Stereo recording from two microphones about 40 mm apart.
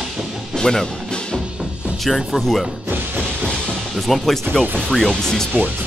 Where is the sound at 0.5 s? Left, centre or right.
Centre.